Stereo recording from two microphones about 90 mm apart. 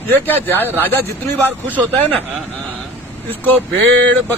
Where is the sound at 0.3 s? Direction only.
25° left (ahead or behind).